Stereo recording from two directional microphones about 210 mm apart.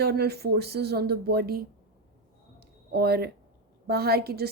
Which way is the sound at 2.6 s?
50° right (ahead or behind).